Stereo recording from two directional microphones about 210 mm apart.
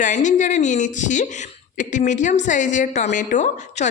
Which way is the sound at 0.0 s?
35° left (ahead or behind).